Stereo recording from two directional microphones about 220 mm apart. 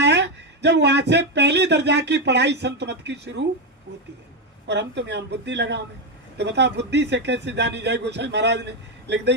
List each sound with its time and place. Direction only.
0.0 s speech: 50° right (ahead or behind)
4.6 s speech: 50° right (ahead or behind)